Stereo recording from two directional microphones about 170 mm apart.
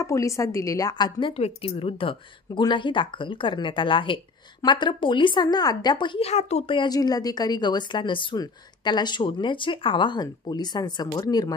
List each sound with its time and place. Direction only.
0.0 s a woman's voice: 20° left (ahead or behind)